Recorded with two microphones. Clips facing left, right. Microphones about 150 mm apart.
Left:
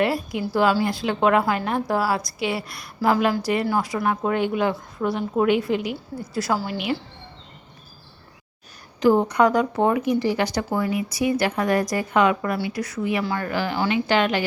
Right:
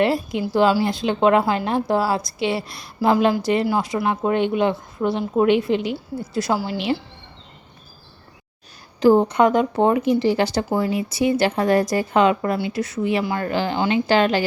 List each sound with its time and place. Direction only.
0.0 s a woman's voice: 25° right (ahead or behind)
9.0 s a woman's voice: 30° right (ahead or behind)